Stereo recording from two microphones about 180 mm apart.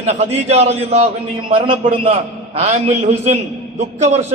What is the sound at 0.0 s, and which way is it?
A man's voice, 40° right (ahead or behind).